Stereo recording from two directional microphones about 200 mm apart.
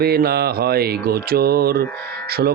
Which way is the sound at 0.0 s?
50° right (ahead or behind).